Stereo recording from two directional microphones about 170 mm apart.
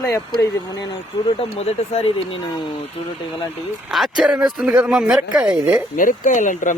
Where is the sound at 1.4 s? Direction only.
35° left (ahead or behind).